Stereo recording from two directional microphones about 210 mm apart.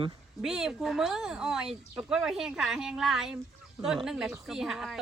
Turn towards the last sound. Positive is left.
turn(degrees=0)  # may be behind; listen again after turning